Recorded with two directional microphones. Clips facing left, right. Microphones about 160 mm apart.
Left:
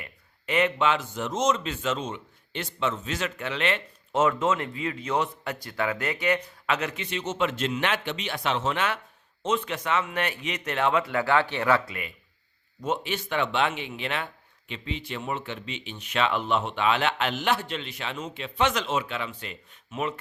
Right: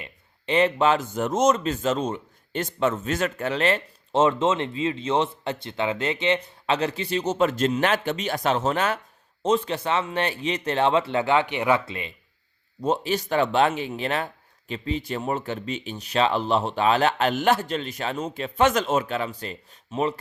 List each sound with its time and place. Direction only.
0.0 s speech: 30° right (ahead or behind)
12.8 s speech: 35° right (ahead or behind)